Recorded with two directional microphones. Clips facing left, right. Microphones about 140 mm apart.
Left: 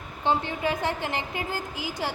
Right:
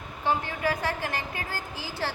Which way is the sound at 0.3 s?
20° left (ahead or behind).